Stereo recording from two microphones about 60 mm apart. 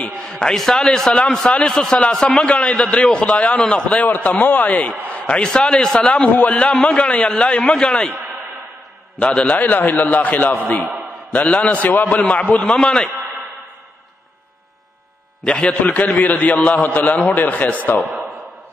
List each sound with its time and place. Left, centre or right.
0.3 s a man's voice: centre; by 4.8 s left
5.1 s a man's voice: centre
9.2 s a man's voice: left
12.7 s a man's voice: centre
15.4 s a man's voice: centre